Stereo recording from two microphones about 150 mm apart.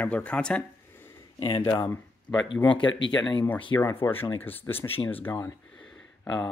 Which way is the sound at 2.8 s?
30° left (ahead or behind).